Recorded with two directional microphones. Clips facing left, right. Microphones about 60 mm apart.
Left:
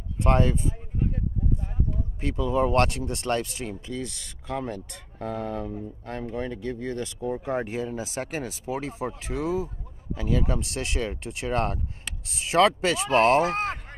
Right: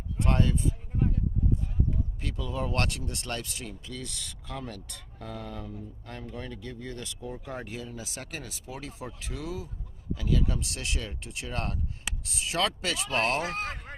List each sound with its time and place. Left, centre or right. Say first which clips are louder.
0.2 s speech: left 5 dB; left
2.2 s speech: left 11 dB; left